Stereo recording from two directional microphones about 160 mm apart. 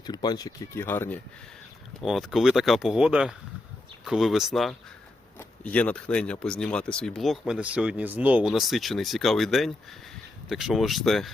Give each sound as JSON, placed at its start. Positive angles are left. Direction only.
{"t": 0.0, "sound": "speech", "side_deg": 25}
{"t": 2.0, "sound": "speech", "side_deg": 0}